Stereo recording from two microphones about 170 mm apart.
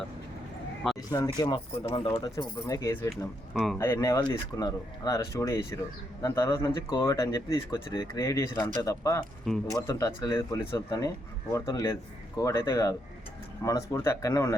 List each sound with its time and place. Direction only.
1.4 s speech: 25° left (ahead or behind)
3.5 s speech: centre (ahead or behind)
3.8 s speech: 15° left (ahead or behind)